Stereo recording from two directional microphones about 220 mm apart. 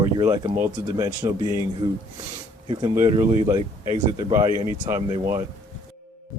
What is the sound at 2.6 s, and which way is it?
Speech, 20° right (ahead or behind).